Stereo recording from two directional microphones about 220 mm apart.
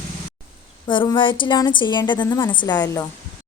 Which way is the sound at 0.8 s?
20° left (ahead or behind).